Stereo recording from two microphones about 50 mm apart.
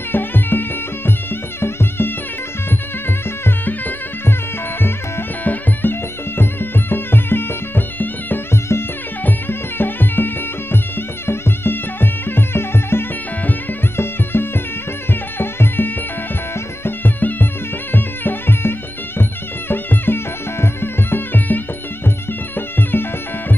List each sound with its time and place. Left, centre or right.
0.1 s music: left
3.4 s music: left
5.4 s music: left
9.5 s music: left
22.8 s music: left